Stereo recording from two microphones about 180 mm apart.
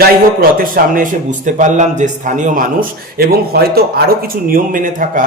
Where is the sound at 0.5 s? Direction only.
50° right (ahead or behind).